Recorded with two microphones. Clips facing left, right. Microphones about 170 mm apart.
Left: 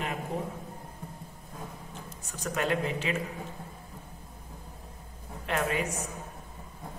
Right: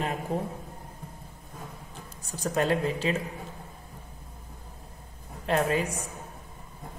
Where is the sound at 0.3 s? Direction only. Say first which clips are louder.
Right 4 dB; 35° right (ahead or behind).